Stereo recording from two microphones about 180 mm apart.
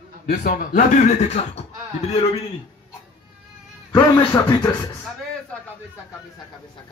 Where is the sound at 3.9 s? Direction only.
25° left (ahead or behind).